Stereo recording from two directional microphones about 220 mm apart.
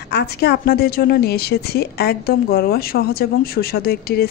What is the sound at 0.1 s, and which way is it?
A woman's voice, 45° left (ahead or behind).